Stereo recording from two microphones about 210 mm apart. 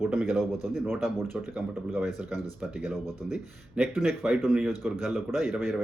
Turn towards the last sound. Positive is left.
turn(degrees=0)  # may be behind; listen again after turning